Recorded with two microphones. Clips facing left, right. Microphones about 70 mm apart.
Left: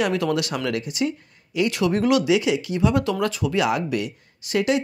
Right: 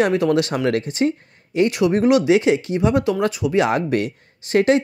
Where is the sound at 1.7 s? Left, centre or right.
Right.